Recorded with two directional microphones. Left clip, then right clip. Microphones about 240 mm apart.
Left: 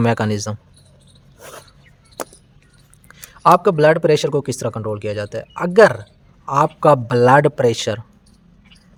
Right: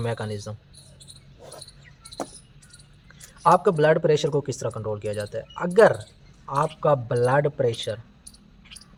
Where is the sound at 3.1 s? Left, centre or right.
Left.